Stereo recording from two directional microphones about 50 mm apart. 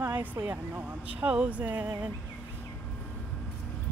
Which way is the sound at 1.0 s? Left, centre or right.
Right.